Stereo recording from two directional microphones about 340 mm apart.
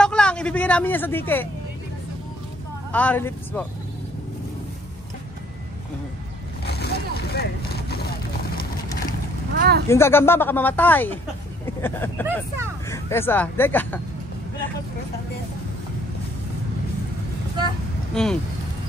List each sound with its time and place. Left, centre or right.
0.0 s speech: centre
2.9 s speech: centre
6.6 s vehicle: left
9.5 s speech: right
9.8 s speech: centre
18.1 s speech: centre